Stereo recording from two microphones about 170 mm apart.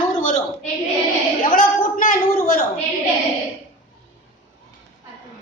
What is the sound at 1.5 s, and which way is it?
A man's voice, 50° left (ahead or behind).